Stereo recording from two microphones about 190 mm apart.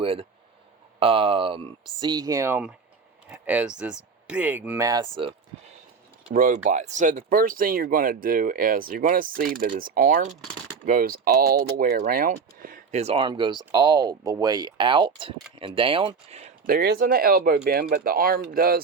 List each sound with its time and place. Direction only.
0.0 s speech: 30° right (ahead or behind)
6.3 s speech: 45° right (ahead or behind)
16.6 s speech: 55° right (ahead or behind)